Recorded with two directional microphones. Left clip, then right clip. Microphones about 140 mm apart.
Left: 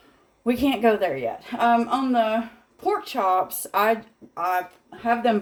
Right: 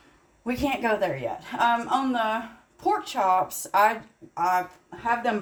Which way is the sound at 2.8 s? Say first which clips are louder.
Even; 30° left (ahead or behind).